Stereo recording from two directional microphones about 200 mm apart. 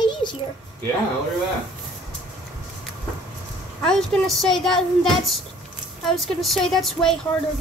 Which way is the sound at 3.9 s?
Centre (ahead or behind).